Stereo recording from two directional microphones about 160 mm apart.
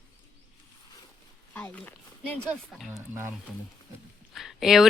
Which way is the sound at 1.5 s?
10° left (ahead or behind).